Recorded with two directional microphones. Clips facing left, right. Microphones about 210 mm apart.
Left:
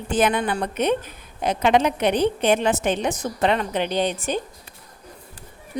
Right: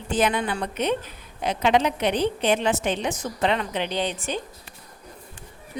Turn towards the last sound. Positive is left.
turn(degrees=50)  # may be behind; listen again after turning